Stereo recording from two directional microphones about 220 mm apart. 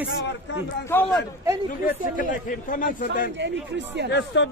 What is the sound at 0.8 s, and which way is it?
Speech, 10° left (ahead or behind).